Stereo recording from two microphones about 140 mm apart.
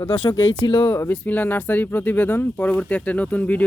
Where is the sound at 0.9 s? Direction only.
15° left (ahead or behind).